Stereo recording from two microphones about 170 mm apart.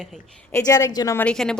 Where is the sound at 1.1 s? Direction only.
5° left (ahead or behind).